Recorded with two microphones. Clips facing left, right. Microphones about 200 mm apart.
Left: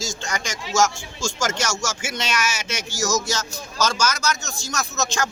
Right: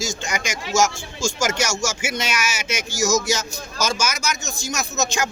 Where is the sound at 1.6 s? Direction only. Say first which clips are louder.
Right 3 dB; 15° right (ahead or behind).